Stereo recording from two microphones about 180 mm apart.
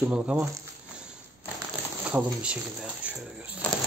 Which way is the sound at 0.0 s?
5° right (ahead or behind).